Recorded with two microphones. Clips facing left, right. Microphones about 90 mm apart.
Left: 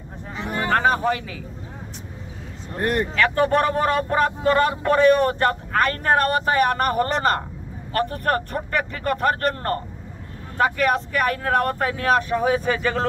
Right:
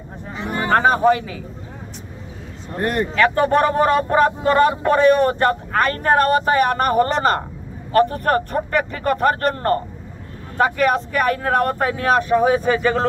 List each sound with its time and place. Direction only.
0.3 s a sound: 5° right (ahead or behind)
0.7 s speech: 25° right (ahead or behind)
2.8 s speech: centre (ahead or behind)
3.2 s speech: 25° right (ahead or behind)